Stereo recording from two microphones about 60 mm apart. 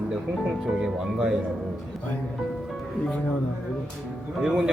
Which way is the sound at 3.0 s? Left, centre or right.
Left.